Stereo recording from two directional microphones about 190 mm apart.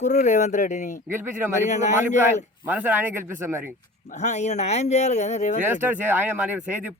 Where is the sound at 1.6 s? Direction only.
40° left (ahead or behind).